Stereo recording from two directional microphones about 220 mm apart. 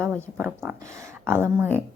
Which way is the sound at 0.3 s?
10° right (ahead or behind).